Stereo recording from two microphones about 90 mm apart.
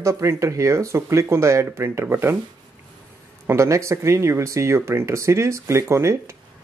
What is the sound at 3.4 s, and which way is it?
Speech, 30° right (ahead or behind).